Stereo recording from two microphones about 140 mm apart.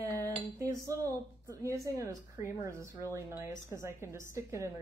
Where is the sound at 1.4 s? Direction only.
20° right (ahead or behind).